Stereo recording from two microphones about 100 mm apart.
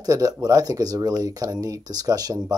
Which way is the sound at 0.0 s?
40° right (ahead or behind).